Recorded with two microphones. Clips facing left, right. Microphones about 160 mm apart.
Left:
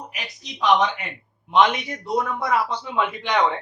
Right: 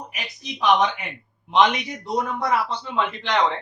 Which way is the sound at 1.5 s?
5° left (ahead or behind).